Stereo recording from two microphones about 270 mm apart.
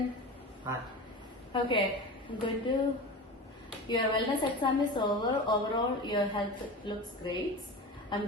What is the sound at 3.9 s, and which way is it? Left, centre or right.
A woman's voice, centre.